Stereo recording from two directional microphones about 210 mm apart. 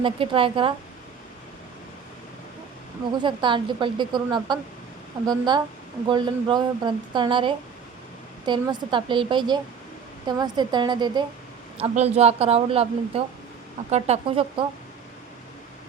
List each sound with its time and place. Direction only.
0.0 s speech: 25° right (ahead or behind)
3.2 s speech: 20° right (ahead or behind)